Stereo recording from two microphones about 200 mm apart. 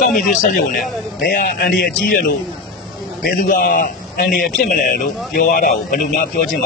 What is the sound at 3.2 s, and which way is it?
A man's voice, 45° left (ahead or behind).